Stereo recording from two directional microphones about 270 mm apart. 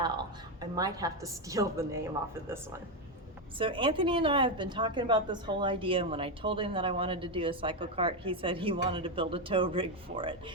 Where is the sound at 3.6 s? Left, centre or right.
Centre.